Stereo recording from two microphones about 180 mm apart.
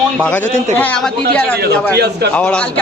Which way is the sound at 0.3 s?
10° left (ahead or behind).